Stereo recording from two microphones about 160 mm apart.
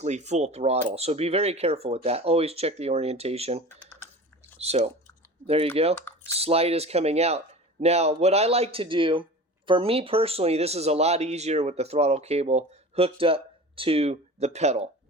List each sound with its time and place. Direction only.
0.0 s speech: 45° right (ahead or behind)
4.6 s speech: 40° right (ahead or behind)